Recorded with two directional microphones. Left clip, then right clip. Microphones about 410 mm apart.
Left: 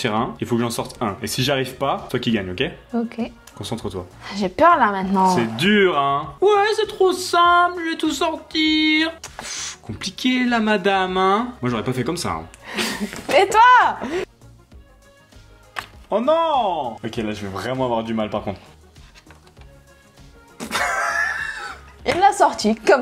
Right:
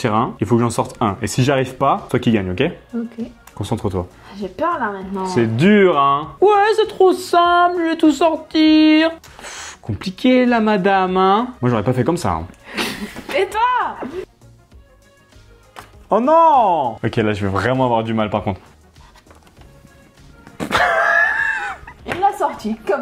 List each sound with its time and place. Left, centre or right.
0.0 s speech: right
4.3 s a woman's voice: left
5.3 s speech: centre
13.3 s a woman's voice: left
16.1 s speech: right
17.8 s speech: right
20.5 s wail: right
22.0 s a woman's voice: left